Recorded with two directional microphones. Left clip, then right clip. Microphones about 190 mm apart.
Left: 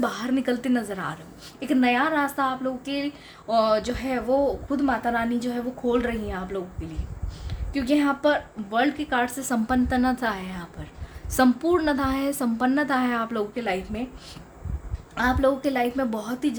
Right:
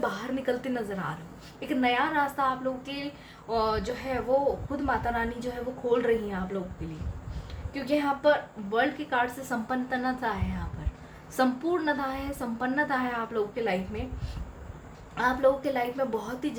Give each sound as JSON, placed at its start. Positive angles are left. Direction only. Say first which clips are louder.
{"t": 0.0, "sound": "a woman's voice", "louder": "left 4 dB", "side_deg": 50}
{"t": 7.7, "sound": "a woman's voice", "louder": "left 4 dB", "side_deg": 50}
{"t": 15.1, "sound": "a woman's voice", "louder": "left 2 dB", "side_deg": 50}